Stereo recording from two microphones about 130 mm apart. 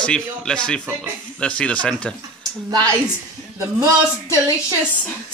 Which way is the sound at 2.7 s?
35° right (ahead or behind).